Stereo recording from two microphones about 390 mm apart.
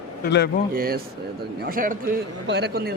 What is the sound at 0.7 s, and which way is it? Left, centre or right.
A man's voice, right.